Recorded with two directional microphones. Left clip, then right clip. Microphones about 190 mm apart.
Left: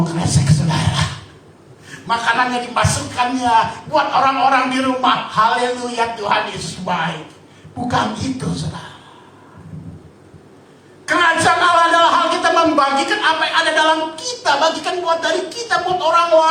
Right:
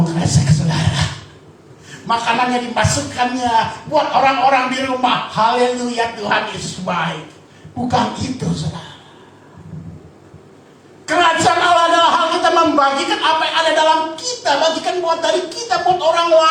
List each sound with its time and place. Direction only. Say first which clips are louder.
0.0 s music: right 1 dB; 25° left (ahead or behind)
2.0 s a man's voice: even; 25° left (ahead or behind)
11.0 s a man's voice: right 1 dB; 25° left (ahead or behind)